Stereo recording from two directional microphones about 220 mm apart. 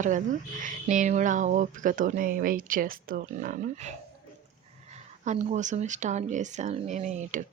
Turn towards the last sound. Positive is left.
turn(degrees=-35)  # may be behind; listen again after turning